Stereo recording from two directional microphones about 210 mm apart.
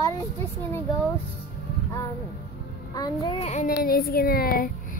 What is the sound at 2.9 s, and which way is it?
A child's voice, 20° left (ahead or behind).